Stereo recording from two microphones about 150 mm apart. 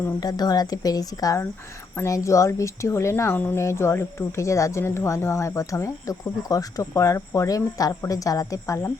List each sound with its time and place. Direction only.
0.0 s speech: 25° left (ahead or behind)